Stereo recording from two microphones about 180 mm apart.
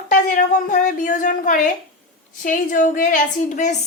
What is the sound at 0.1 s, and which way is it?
A woman's voice, 45° left (ahead or behind).